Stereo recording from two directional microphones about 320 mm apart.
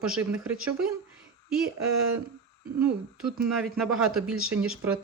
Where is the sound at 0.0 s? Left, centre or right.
Centre.